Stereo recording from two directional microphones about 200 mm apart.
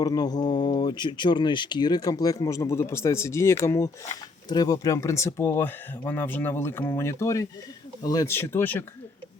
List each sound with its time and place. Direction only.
0.0 s speech: 20° left (ahead or behind)